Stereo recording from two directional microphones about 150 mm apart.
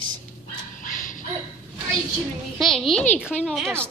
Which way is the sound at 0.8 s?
65° left (ahead or behind).